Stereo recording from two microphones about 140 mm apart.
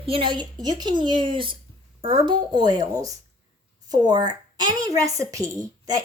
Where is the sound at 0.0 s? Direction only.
40° right (ahead or behind).